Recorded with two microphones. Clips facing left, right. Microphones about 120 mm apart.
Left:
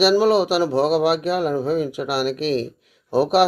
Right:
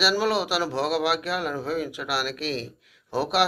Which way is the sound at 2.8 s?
45° left (ahead or behind).